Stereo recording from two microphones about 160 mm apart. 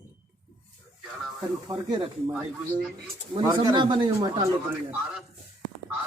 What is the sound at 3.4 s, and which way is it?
A man's voice, 25° right (ahead or behind).